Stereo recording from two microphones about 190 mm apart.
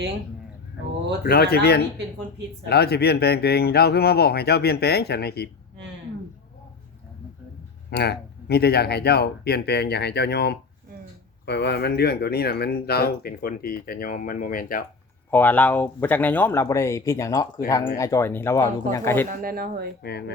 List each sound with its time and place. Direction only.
1.2 s speech: 55° left (ahead or behind)
7.9 s speech: 60° left (ahead or behind)
15.3 s speech: 10° left (ahead or behind)
19.4 s speech: 50° right (ahead or behind)
20.0 s speech: 60° left (ahead or behind)